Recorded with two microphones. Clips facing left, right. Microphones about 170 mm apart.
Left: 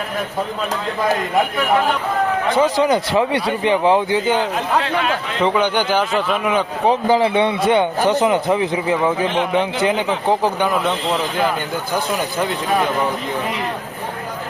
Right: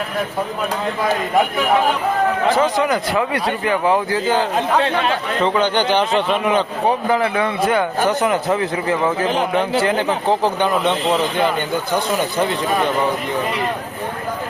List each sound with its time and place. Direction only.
2.6 s speech: 25° left (ahead or behind)
5.4 s a man's voice: 15° left (ahead or behind)
6.8 s speech: 25° left (ahead or behind)